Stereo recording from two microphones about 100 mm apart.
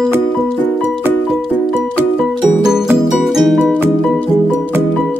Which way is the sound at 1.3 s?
5° right (ahead or behind).